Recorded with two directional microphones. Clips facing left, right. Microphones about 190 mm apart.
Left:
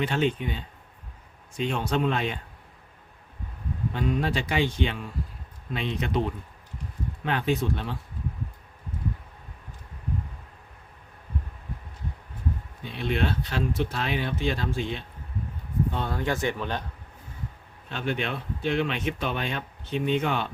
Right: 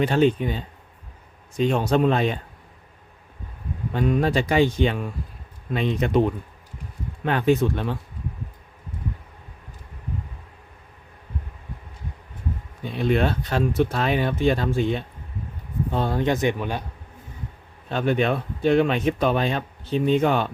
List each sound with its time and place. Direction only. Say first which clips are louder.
0.0 s speech: right 7 dB; 40° right (ahead or behind)
3.9 s speech: right 7 dB; 45° right (ahead or behind)
7.3 s speech: right 6 dB; 50° right (ahead or behind)
12.8 s speech: right 6 dB; 45° right (ahead or behind)
15.9 s speech: right 6 dB; 40° right (ahead or behind)
16.1 s speech: right 6 dB; 20° right (ahead or behind)
17.8 s speech: right 8 dB; 45° right (ahead or behind)